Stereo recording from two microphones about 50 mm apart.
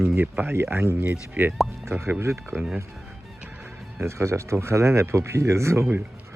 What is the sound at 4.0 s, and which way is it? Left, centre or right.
Speech, right.